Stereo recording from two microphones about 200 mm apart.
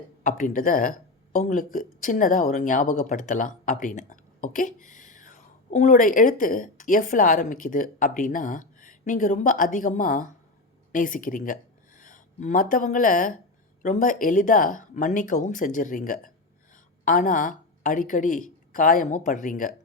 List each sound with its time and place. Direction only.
0.2 s a woman's voice: 40° left (ahead or behind)